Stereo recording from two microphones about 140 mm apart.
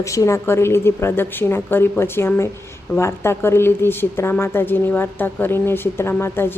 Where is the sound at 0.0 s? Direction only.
20° left (ahead or behind).